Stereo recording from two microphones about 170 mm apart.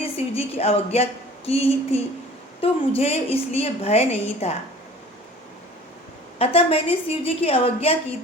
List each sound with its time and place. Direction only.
0.0 s a woman's voice: 35° left (ahead or behind)
6.4 s a woman's voice: 35° left (ahead or behind)